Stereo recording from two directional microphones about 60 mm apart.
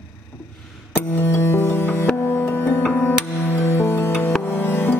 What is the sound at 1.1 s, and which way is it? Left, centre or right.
Music, left.